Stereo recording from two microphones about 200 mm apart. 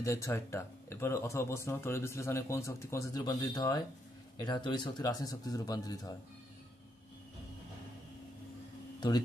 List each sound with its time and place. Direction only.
0.0 s speech: 15° left (ahead or behind)